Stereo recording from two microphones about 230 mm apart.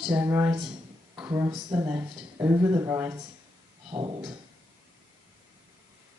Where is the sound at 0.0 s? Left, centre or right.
Centre.